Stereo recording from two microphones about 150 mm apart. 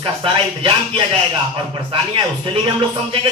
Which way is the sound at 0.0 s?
35° right (ahead or behind).